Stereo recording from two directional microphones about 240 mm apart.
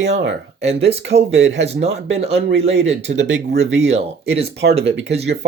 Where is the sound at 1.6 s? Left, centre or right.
Right.